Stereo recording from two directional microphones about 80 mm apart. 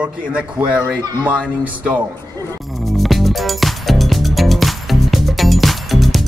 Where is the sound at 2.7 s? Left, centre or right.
Centre.